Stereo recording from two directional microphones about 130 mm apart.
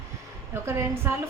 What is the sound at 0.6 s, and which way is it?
Speech, 20° right (ahead or behind).